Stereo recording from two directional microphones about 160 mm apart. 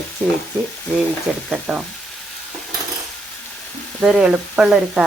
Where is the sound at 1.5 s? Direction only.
5° right (ahead or behind).